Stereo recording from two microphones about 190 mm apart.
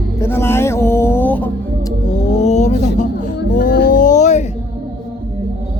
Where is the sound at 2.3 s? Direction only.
35° left (ahead or behind).